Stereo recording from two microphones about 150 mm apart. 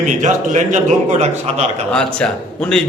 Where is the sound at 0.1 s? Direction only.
55° right (ahead or behind).